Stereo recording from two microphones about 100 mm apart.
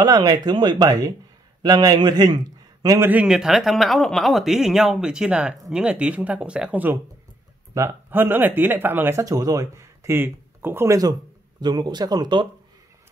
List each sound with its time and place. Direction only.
0.0 s a man's voice: 40° right (ahead or behind)
3.0 s speech: 15° right (ahead or behind)
7.7 s speech: 25° right (ahead or behind)
9.2 s speech: 40° right (ahead or behind)
11.6 s speech: 45° right (ahead or behind)